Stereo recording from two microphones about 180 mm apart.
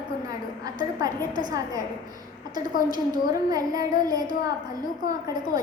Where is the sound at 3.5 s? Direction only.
20° right (ahead or behind).